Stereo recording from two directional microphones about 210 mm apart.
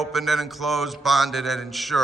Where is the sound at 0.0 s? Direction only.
Centre (ahead or behind).